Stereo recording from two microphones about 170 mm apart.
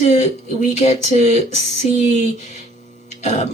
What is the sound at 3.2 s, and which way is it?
Throat clearing, 45° left (ahead or behind).